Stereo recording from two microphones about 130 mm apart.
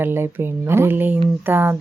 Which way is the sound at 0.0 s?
15° right (ahead or behind).